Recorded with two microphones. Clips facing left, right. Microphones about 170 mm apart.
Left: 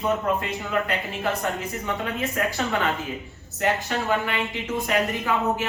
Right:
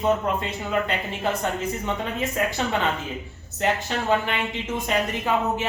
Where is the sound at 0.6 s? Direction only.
20° right (ahead or behind).